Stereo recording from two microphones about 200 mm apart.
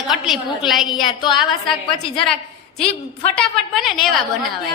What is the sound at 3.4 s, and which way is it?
Speech, centre (ahead or behind).